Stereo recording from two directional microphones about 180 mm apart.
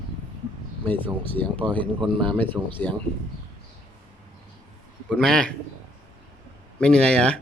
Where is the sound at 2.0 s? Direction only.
30° right (ahead or behind).